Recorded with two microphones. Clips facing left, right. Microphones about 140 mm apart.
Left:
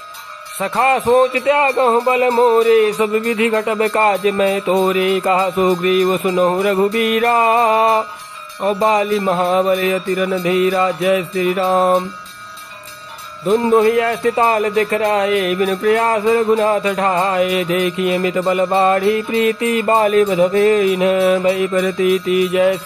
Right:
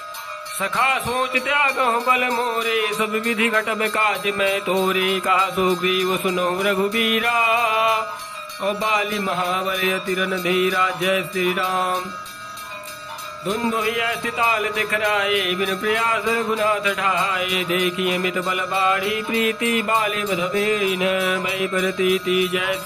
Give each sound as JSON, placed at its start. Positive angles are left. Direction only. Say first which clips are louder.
{"t": 0.6, "sound": "a man's voice", "louder": "left 7 dB", "side_deg": 35}
{"t": 13.5, "sound": "a man's voice", "louder": "left 10 dB", "side_deg": 40}